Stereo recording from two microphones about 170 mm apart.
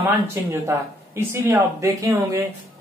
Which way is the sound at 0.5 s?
15° right (ahead or behind).